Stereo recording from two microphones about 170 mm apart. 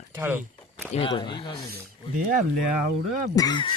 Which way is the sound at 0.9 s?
30° left (ahead or behind).